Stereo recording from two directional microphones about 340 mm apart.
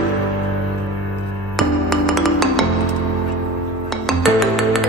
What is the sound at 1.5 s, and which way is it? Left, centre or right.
Music, centre.